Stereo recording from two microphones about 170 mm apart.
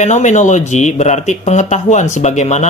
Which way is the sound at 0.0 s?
45° left (ahead or behind).